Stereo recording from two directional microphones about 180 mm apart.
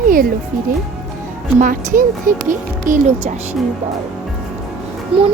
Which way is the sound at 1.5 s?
50° right (ahead or behind).